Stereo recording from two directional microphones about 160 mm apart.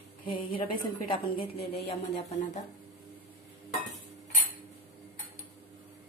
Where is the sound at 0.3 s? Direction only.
30° left (ahead or behind).